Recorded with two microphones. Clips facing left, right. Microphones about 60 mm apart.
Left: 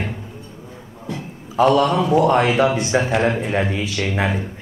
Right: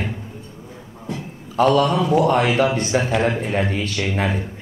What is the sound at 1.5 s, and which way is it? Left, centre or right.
A man's voice, centre.